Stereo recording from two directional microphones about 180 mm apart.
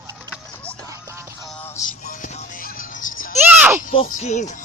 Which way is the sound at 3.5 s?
10° right (ahead or behind).